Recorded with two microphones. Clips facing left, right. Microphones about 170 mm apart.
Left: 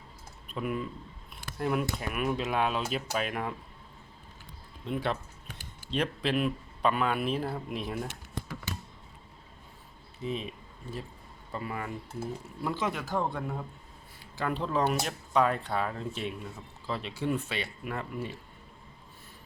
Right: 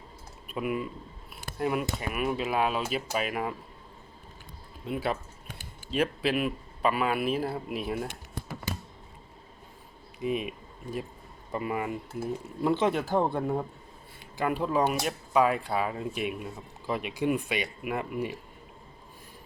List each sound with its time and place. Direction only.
0.4 s a man's voice: 5° right (ahead or behind)
4.9 s a man's voice: 5° right (ahead or behind)
10.2 s speech: 15° right (ahead or behind)
12.6 s speech: 30° right (ahead or behind)
14.3 s speech: 10° right (ahead or behind)